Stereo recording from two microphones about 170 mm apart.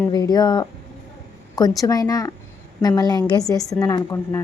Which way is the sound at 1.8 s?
20° left (ahead or behind).